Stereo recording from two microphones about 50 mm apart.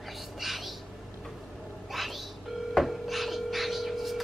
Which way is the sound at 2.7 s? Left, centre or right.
Centre.